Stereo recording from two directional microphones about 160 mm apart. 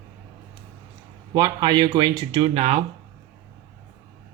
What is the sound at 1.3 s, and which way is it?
A man's voice, 25° right (ahead or behind).